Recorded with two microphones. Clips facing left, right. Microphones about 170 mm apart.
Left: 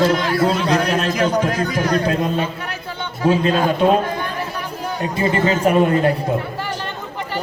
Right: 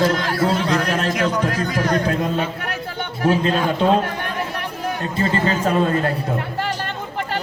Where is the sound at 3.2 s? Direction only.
15° left (ahead or behind).